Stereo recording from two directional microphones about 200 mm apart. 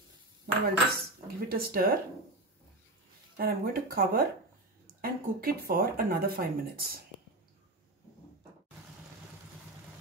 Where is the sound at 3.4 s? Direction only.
50° right (ahead or behind).